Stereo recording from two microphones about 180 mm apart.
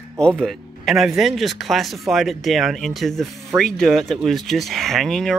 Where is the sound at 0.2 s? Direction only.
5° left (ahead or behind).